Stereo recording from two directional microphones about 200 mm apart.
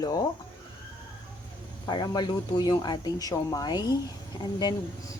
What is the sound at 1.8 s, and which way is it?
A woman's voice, 20° left (ahead or behind).